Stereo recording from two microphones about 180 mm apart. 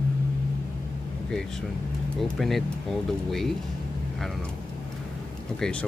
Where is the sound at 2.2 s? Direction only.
Centre (ahead or behind).